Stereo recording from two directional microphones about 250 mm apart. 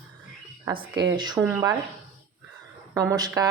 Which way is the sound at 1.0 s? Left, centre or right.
Centre.